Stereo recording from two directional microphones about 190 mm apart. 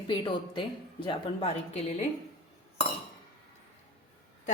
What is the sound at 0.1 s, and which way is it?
Speech, 25° left (ahead or behind).